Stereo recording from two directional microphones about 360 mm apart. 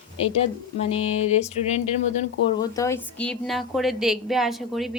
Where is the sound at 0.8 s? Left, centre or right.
Centre.